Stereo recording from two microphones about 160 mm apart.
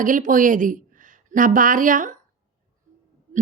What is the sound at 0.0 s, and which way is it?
Speech, 55° right (ahead or behind).